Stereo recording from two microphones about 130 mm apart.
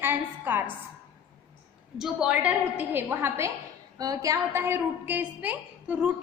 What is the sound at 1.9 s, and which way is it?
A woman's voice, 5° right (ahead or behind).